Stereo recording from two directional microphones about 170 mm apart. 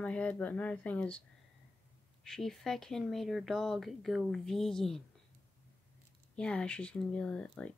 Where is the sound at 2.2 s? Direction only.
Centre (ahead or behind).